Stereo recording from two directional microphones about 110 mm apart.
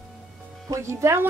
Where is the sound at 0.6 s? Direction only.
30° right (ahead or behind).